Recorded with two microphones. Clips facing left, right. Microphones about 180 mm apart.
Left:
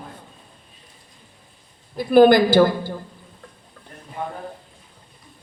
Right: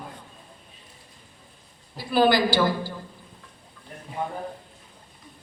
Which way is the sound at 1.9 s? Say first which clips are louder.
Left 8 dB; 50° left (ahead or behind).